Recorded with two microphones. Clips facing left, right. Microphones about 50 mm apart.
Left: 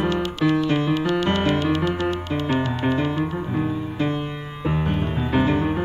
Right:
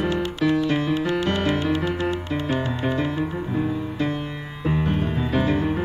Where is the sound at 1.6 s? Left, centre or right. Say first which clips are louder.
Left 1 dB; left.